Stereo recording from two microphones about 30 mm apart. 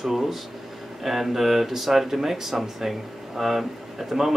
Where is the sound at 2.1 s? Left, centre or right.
Centre.